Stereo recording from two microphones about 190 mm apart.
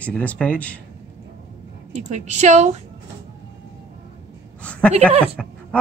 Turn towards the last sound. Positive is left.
turn(degrees=0)  # may be behind; listen again after turning